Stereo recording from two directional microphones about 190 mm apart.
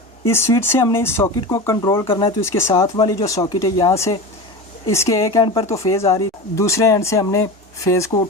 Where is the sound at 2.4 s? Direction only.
15° left (ahead or behind).